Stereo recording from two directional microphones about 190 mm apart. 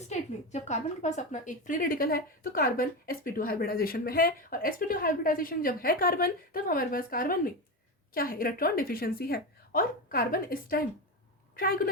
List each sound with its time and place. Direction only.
0.1 s a woman's voice: 35° left (ahead or behind)